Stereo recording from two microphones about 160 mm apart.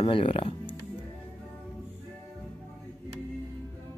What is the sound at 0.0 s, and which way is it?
Speech, 35° left (ahead or behind).